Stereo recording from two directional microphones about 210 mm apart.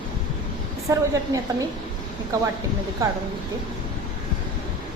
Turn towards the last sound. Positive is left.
turn(degrees=-15)  # may be behind; listen again after turning